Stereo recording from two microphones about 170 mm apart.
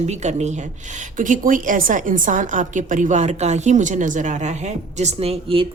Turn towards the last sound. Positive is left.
turn(degrees=-35)  # may be behind; listen again after turning